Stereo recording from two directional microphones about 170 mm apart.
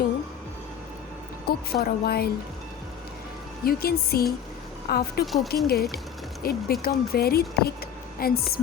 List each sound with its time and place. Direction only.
1.5 s speech: 65° left (ahead or behind)
3.6 s speech: 60° left (ahead or behind)
5.2 s speech: centre (ahead or behind)
5.5 s speech: 65° left (ahead or behind)